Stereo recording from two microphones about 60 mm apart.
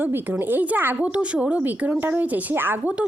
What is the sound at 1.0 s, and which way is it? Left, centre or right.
Speech, right.